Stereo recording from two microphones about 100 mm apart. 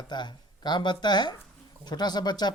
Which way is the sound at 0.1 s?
50° left (ahead or behind).